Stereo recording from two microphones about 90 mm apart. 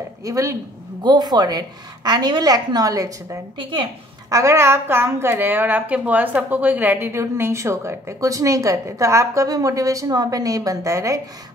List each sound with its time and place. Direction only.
0.2 s a woman's voice: 35° right (ahead or behind)
1.0 s a woman's voice: 50° right (ahead or behind); by 11.1 s 35° right (ahead or behind)